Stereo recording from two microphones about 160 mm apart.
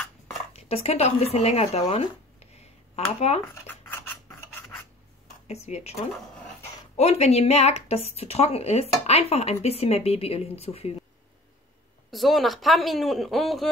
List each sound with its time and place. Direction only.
0.5 s speech: 40° left (ahead or behind)
1.9 s a sound: 40° left (ahead or behind)
3.6 s scissors: 10° left (ahead or behind)
5.5 s speech: 40° left (ahead or behind)
7.0 s speech: 40° left (ahead or behind)
12.1 s speech: centre (ahead or behind)